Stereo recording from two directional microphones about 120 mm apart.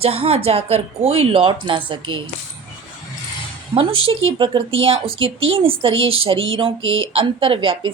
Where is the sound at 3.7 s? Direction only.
50° right (ahead or behind).